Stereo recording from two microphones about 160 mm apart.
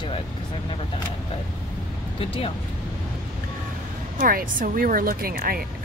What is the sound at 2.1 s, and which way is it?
Speech, 35° left (ahead or behind).